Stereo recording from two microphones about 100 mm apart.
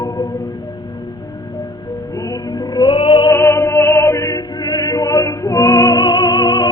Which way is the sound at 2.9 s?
60° left (ahead or behind).